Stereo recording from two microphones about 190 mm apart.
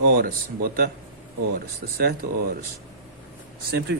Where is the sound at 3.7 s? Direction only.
60° right (ahead or behind).